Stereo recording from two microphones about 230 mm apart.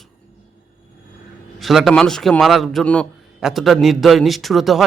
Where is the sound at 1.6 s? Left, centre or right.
Centre.